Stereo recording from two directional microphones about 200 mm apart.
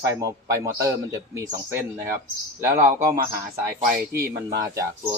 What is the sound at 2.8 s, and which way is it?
Speech, 35° right (ahead or behind).